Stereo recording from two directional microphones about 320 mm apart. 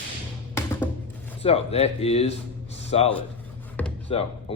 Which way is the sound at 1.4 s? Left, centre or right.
Centre.